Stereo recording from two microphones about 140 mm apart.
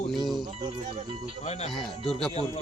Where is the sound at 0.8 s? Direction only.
50° right (ahead or behind).